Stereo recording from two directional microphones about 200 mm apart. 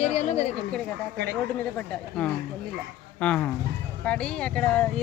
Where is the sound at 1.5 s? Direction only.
5° left (ahead or behind).